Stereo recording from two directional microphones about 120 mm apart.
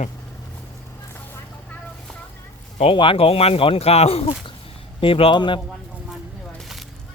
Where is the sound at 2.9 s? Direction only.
45° left (ahead or behind).